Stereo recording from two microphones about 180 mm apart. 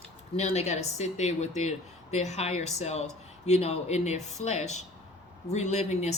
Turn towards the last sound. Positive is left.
turn(degrees=40)  # may be behind; listen again after turning